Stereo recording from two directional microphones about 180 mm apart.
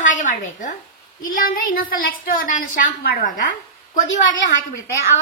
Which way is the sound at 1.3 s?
50° left (ahead or behind).